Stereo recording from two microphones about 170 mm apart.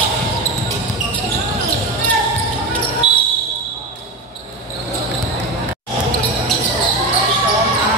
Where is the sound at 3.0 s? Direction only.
25° left (ahead or behind).